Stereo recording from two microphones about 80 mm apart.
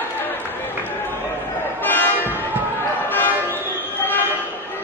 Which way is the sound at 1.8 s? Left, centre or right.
Left.